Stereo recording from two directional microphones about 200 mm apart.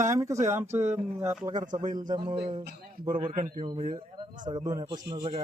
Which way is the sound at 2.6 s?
45° right (ahead or behind).